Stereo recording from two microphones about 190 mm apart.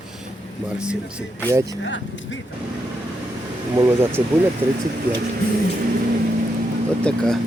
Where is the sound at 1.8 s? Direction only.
75° left (ahead or behind).